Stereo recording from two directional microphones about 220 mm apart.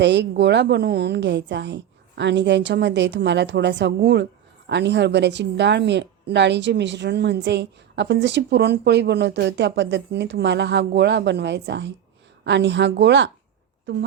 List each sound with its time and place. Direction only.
0.0 s a woman's voice: 50° right (ahead or behind)